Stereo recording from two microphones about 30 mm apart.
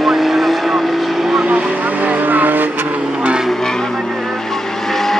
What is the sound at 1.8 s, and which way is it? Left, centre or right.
Vehicle, right.